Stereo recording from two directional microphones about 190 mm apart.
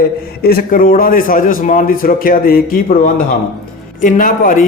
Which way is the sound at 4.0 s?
45° left (ahead or behind).